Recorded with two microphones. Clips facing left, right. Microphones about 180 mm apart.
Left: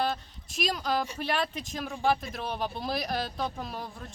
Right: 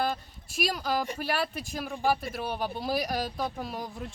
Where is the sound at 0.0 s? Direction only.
10° right (ahead or behind).